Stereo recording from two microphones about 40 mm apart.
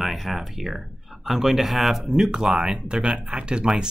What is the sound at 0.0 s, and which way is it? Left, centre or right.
Speech, centre.